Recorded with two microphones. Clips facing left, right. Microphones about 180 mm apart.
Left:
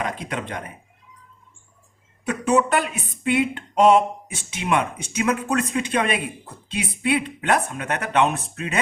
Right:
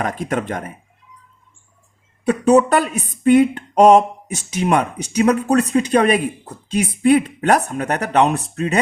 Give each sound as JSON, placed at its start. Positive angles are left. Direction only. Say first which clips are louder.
{"t": 0.0, "sound": "speech", "louder": "right 6 dB", "side_deg": -45}
{"t": 2.2, "sound": "speech", "louder": "right 7 dB", "side_deg": -35}